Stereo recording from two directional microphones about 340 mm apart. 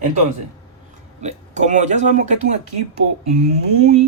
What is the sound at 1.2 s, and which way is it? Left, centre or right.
Speech, right.